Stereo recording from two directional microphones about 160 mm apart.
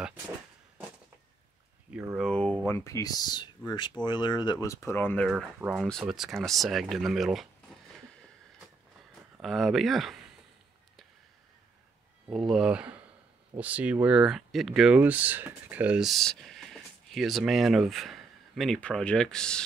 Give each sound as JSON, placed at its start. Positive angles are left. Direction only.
{"t": 2.1, "sound": "speech", "side_deg": 5}
{"t": 5.6, "sound": "speech", "side_deg": 0}
{"t": 9.4, "sound": "speech", "side_deg": 0}
{"t": 12.3, "sound": "speech", "side_deg": 0}